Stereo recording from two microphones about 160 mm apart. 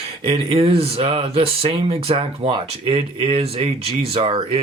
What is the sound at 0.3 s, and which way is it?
Speech, 40° right (ahead or behind).